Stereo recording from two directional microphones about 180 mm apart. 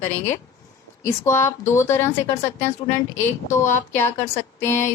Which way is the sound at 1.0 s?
15° left (ahead or behind).